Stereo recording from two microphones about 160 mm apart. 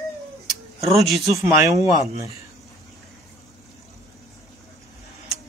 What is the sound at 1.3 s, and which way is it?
Speech, 20° right (ahead or behind).